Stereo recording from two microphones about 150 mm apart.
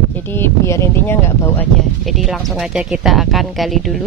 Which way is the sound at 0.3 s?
15° left (ahead or behind).